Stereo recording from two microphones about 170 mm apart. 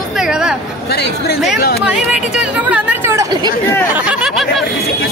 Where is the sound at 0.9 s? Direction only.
70° left (ahead or behind).